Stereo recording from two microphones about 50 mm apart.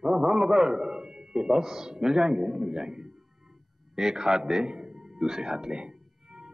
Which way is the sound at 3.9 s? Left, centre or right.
Centre.